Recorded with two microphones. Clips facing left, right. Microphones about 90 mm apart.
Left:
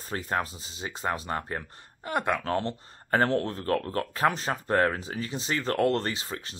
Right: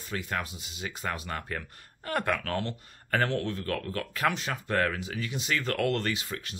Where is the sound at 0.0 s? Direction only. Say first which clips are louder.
Left 4 dB; 35° left (ahead or behind).